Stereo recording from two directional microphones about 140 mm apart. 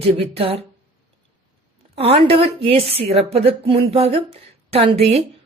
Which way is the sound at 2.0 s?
40° right (ahead or behind).